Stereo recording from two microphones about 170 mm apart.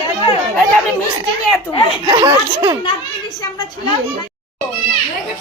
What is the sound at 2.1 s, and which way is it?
Speech, 30° right (ahead or behind).